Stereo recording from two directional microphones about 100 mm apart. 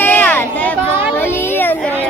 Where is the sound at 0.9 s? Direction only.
15° right (ahead or behind).